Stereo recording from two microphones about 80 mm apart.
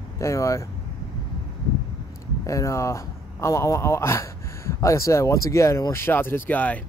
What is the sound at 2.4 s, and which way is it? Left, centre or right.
Speech, left.